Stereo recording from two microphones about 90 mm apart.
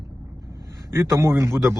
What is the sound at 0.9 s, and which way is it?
Speech, 35° right (ahead or behind).